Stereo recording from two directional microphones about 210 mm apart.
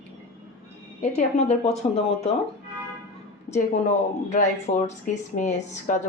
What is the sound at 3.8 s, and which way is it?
Speech, 35° left (ahead or behind).